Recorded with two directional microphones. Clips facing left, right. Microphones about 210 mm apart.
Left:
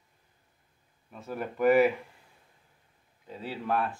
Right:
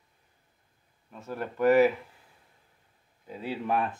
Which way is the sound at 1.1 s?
5° left (ahead or behind).